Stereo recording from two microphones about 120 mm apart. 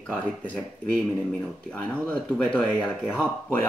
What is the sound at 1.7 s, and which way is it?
Speech, 10° left (ahead or behind).